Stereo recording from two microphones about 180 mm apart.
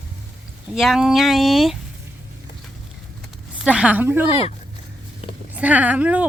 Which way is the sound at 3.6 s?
5° right (ahead or behind).